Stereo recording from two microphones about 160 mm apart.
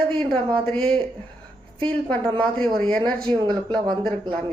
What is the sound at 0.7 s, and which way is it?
Speech, 5° left (ahead or behind).